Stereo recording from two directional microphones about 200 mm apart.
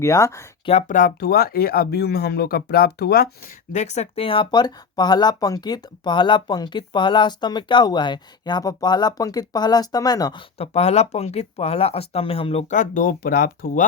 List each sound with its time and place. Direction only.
0.0 s speech: 15° left (ahead or behind)
0.6 s speech: 30° left (ahead or behind)
10.6 s speech: 30° left (ahead or behind); by 13.8 s 45° left (ahead or behind)